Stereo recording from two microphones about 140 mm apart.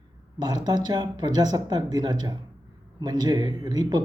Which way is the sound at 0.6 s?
30° right (ahead or behind).